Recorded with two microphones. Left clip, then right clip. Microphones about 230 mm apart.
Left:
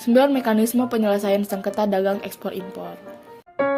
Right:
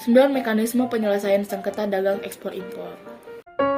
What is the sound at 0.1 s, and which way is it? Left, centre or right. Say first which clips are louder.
A woman's voice: even; left.